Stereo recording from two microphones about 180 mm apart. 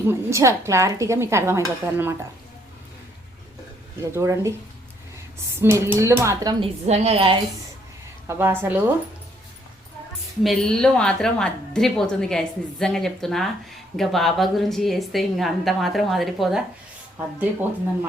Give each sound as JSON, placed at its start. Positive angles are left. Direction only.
{"t": 0.1, "sound": "speech", "side_deg": -15}
{"t": 4.0, "sound": "speech", "side_deg": -15}
{"t": 5.5, "sound": "speech", "side_deg": -15}
{"t": 6.8, "sound": "a woman's voice", "side_deg": -35}
{"t": 8.3, "sound": "speech", "side_deg": -15}
{"t": 10.4, "sound": "a woman's voice", "side_deg": 0}